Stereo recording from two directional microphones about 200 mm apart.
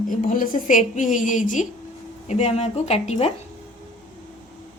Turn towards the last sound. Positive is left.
turn(degrees=30)  # may be behind; listen again after turning